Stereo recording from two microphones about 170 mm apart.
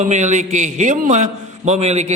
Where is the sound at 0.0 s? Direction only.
45° right (ahead or behind).